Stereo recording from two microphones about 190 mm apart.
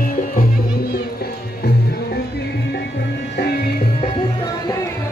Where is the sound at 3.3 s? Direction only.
60° left (ahead or behind).